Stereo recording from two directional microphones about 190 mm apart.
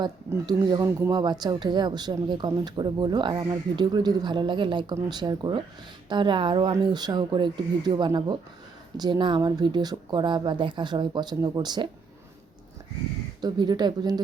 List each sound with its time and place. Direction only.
0.0 s speech: 20° right (ahead or behind)
13.4 s speech: 20° right (ahead or behind)